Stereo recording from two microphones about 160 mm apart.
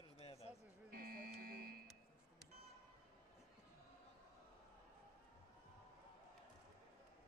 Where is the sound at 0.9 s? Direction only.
65° right (ahead or behind).